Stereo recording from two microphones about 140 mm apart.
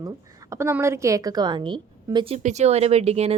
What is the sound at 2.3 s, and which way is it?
Speech, 55° right (ahead or behind).